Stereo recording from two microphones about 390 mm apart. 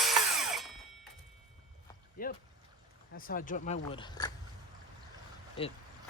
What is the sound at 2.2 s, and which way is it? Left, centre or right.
Speech, left.